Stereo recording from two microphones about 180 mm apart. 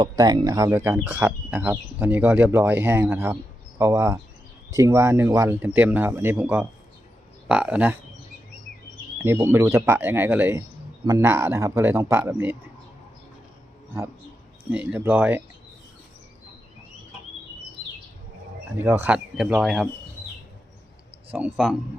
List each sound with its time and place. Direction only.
0.0 s speech: 20° right (ahead or behind); by 7.9 s 5° right (ahead or behind)
9.1 s speech: 15° right (ahead or behind)
14.7 s speech: 10° right (ahead or behind)
18.8 s speech: 10° right (ahead or behind)
21.3 s speech: 5° right (ahead or behind)